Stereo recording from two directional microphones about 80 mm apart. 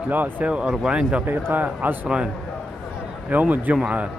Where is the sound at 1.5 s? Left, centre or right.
Right.